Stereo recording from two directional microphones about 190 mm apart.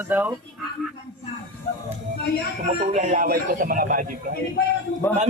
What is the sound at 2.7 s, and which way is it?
Speech, 40° right (ahead or behind).